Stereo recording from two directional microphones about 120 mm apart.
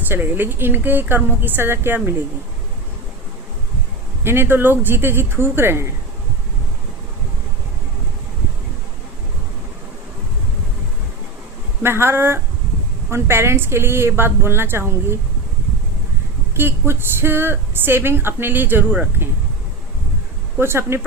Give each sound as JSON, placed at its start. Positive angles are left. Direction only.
{"t": 0.1, "sound": "a woman's voice", "side_deg": -15}
{"t": 4.2, "sound": "speech", "side_deg": -20}
{"t": 11.8, "sound": "speech", "side_deg": -20}
{"t": 16.6, "sound": "speech", "side_deg": -20}
{"t": 20.6, "sound": "speech", "side_deg": -20}